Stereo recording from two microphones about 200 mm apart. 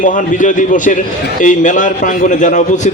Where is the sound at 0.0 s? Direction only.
40° left (ahead or behind).